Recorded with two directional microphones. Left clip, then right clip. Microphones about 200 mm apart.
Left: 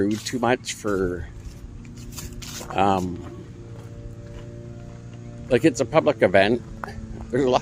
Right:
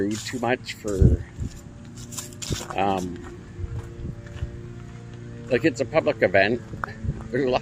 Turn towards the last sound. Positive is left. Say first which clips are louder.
# left 3 dB
turn(degrees=20)  # may be behind; listen again after turning